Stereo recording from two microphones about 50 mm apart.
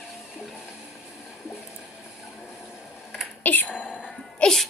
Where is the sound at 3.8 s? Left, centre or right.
Left.